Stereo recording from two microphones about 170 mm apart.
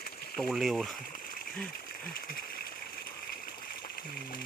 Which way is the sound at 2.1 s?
60° left (ahead or behind).